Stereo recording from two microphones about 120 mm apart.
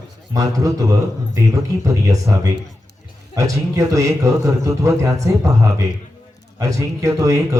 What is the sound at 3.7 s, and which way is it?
A man's voice, 25° right (ahead or behind).